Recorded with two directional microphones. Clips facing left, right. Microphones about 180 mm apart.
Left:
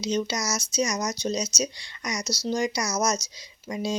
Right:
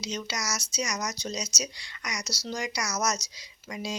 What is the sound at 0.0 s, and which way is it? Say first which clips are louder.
Speech: left 8 dB; 25° left (ahead or behind).